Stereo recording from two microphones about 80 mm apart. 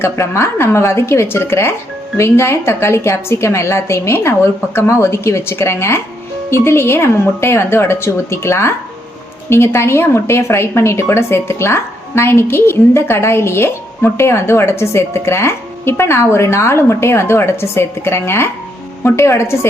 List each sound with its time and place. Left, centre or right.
0.0 s a woman's voice: left